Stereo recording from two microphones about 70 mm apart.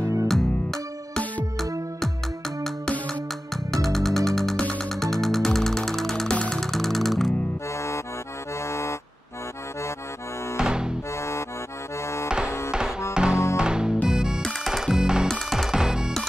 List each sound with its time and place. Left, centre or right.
0.3 s music: centre
3.7 s music: centre
6.6 s music: centre
7.7 s accordion: left
10.6 s music: centre
11.1 s accordion: left
12.0 s music: left
12.3 s music: centre
14.4 s music: centre
14.7 s music: centre
15.2 s music: centre
15.7 s music: centre